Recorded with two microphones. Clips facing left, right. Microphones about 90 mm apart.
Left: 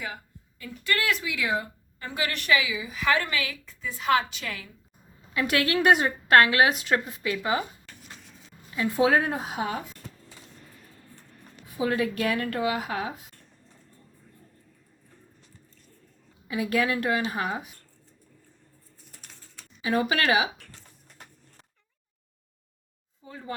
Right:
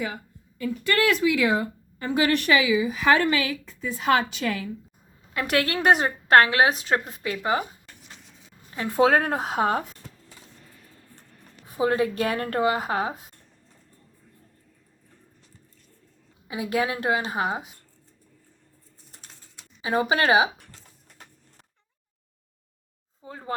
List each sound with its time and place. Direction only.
0.6 s speech: 50° right (ahead or behind)
2.0 s a woman's voice: 30° right (ahead or behind)
8.7 s speech: 45° right (ahead or behind)
11.8 s speech: 30° right (ahead or behind)
16.5 s a woman's voice: 25° right (ahead or behind)
19.8 s a woman's voice: 25° right (ahead or behind)
23.2 s speech: 40° right (ahead or behind)